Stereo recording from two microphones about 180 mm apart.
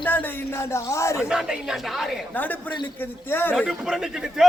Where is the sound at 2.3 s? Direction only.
10° left (ahead or behind).